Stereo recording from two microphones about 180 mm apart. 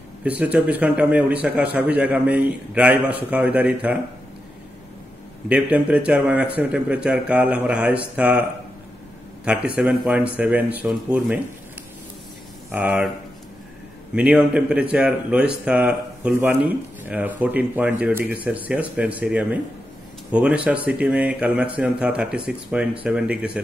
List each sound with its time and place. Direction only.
0.2 s speech: 10° right (ahead or behind)
5.5 s a man's voice: 5° right (ahead or behind)
12.7 s speech: 10° right (ahead or behind)
14.1 s speech: 5° right (ahead or behind)